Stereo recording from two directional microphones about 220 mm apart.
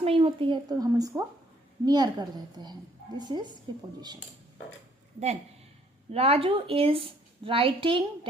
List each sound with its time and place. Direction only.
0.0 s a woman's voice: 25° right (ahead or behind)
6.1 s a woman's voice: 25° right (ahead or behind)